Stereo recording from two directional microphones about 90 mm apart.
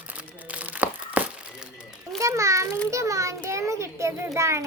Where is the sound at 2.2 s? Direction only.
35° right (ahead or behind).